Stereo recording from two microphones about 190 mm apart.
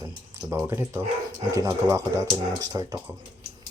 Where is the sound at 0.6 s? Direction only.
15° right (ahead or behind).